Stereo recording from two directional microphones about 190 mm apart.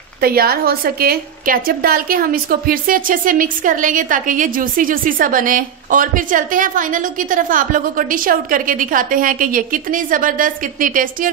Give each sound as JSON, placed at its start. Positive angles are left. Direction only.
{"t": 0.2, "sound": "a woman's voice", "side_deg": -55}